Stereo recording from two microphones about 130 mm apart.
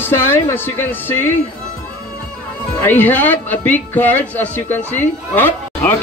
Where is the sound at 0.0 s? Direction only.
20° left (ahead or behind).